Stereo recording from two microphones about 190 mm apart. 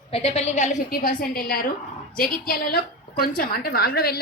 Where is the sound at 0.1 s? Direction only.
30° left (ahead or behind).